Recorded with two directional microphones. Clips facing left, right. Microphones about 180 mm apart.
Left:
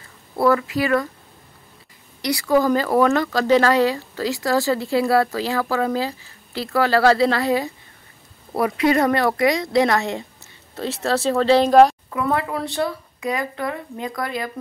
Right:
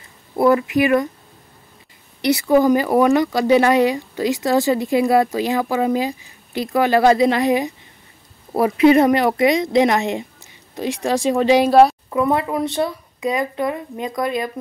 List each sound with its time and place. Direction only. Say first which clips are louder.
0.4 s speech: right 3 dB; 20° right (ahead or behind)
2.2 s speech: right 4 dB; 20° right (ahead or behind)
12.1 s speech: right 4 dB; 20° right (ahead or behind)